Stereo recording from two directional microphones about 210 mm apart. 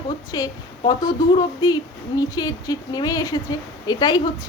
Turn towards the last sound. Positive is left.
turn(degrees=20)  # may be behind; listen again after turning